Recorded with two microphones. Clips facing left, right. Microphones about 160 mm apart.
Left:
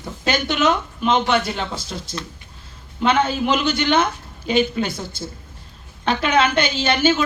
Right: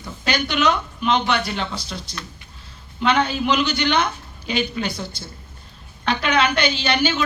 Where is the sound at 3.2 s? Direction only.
50° left (ahead or behind).